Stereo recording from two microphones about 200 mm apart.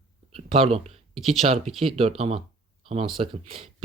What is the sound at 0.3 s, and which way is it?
Speech, 30° right (ahead or behind).